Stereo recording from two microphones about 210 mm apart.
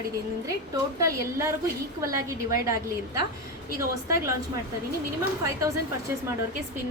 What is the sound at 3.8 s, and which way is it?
Speech, 15° right (ahead or behind).